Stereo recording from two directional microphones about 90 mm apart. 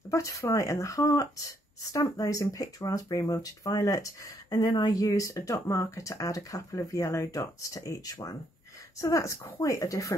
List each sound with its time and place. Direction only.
0.1 s speech: 35° left (ahead or behind)